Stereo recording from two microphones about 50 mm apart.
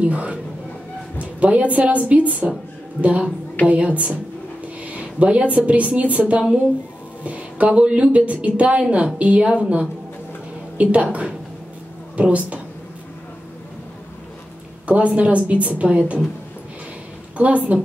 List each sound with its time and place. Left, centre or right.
0.0 s a woman's voice: right
4.8 s a sound: right
5.7 s a woman's voice: right
14.9 s a woman's voice: right
17.4 s a woman's voice: right